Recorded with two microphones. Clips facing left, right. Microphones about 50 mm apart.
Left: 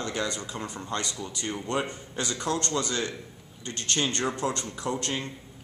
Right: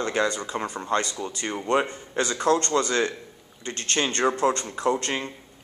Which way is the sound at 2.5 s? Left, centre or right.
Right.